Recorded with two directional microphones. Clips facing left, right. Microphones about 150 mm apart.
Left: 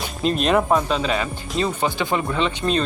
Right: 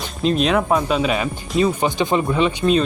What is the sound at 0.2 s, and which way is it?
Speech, centre (ahead or behind).